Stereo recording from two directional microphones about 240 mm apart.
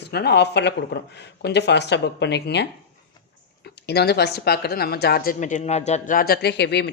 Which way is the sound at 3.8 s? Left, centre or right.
Left.